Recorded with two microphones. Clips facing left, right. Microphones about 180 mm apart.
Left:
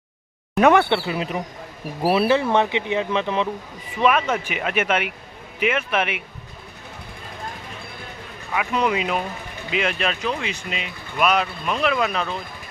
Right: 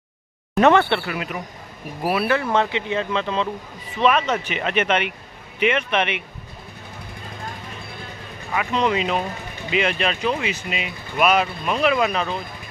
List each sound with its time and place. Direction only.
0.6 s speech: 10° left (ahead or behind)
1.1 s a man's voice: 30° left (ahead or behind); by 6.2 s 5° left (ahead or behind)
8.5 s speech: 5° left (ahead or behind)